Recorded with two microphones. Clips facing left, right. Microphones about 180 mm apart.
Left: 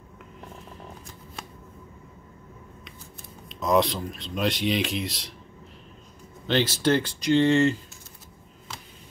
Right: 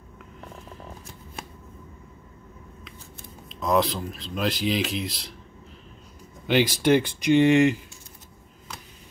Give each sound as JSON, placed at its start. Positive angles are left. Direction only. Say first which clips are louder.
{"t": 3.4, "sound": "speech", "louder": "left 1 dB", "side_deg": 0}
{"t": 6.4, "sound": "speech", "louder": "right 2 dB", "side_deg": -15}